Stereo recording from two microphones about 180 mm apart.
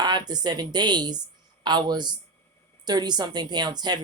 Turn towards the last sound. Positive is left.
turn(degrees=-25)  # may be behind; listen again after turning